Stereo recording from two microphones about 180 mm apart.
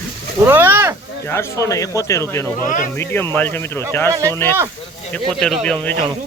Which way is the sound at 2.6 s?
45° left (ahead or behind).